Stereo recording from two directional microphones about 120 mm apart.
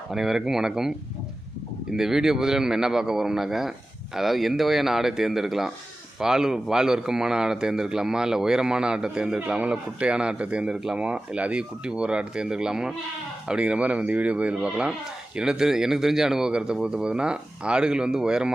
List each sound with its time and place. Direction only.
0.1 s a man's voice: centre (ahead or behind)